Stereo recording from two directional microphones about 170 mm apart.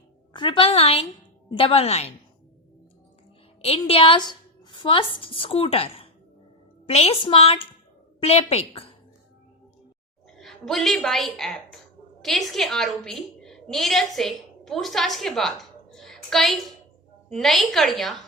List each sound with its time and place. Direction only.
0.3 s a woman's voice: 30° left (ahead or behind)
3.6 s a woman's voice: 35° left (ahead or behind)
10.3 s a woman's voice: centre (ahead or behind)